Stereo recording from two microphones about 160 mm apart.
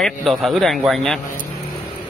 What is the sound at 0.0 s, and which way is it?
A man's voice, centre (ahead or behind).